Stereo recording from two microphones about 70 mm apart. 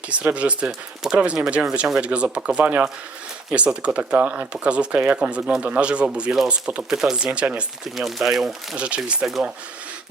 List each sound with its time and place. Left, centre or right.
0.1 s speech: centre
0.7 s speech: centre
1.2 s speech: centre
7.9 s speech: centre